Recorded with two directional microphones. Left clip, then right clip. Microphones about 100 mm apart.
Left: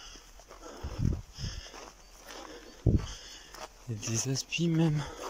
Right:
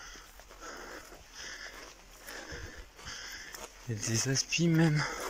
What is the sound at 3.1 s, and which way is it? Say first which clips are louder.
Crow: right 4 dB; 35° left (ahead or behind).